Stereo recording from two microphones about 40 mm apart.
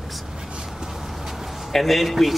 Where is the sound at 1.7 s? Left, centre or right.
Centre.